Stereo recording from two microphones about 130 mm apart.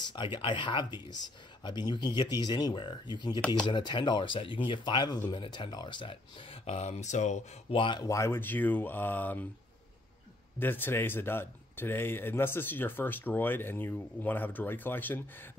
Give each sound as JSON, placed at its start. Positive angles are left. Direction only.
{"t": 0.1, "sound": "speech", "side_deg": 40}
{"t": 3.3, "sound": "speech", "side_deg": 10}
{"t": 3.6, "sound": "speech", "side_deg": 35}
{"t": 6.6, "sound": "speech", "side_deg": 55}
{"t": 7.7, "sound": "speech", "side_deg": 40}
{"t": 8.1, "sound": "speech", "side_deg": 20}
{"t": 10.6, "sound": "speech", "side_deg": 15}